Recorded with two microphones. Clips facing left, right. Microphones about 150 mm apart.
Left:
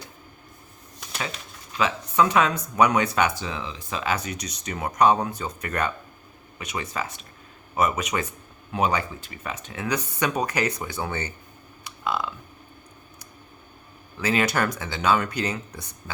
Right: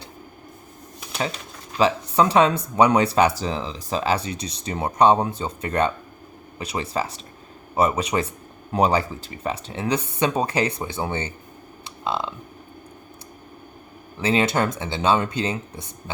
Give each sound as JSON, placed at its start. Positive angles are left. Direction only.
{"t": 1.8, "sound": "speech", "side_deg": -35}
{"t": 11.9, "sound": "burping", "side_deg": -25}
{"t": 14.2, "sound": "speech", "side_deg": -25}